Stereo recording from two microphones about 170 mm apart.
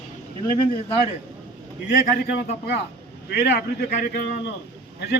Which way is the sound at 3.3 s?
75° left (ahead or behind).